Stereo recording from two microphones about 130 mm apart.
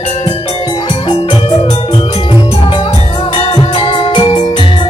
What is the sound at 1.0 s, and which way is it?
Music, 40° left (ahead or behind).